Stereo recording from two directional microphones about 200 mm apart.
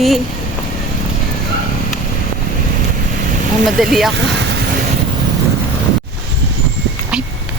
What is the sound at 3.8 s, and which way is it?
Speech, centre (ahead or behind).